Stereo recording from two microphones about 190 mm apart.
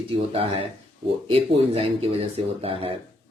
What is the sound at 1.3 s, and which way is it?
Speech, 30° right (ahead or behind).